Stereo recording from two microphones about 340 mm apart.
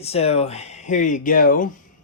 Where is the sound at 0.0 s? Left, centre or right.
Centre.